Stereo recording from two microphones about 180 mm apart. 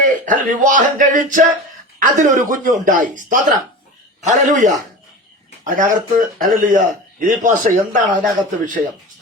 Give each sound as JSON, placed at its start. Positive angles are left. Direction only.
{"t": 0.3, "sound": "a man's voice", "side_deg": -45}